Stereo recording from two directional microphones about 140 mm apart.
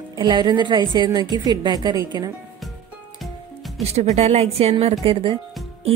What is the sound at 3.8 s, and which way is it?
A woman's voice, 50° right (ahead or behind).